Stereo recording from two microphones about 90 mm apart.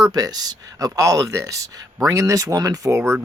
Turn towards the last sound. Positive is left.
turn(degrees=-35)  # may be behind; listen again after turning